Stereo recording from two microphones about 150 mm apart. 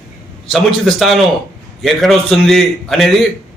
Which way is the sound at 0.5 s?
Centre (ahead or behind).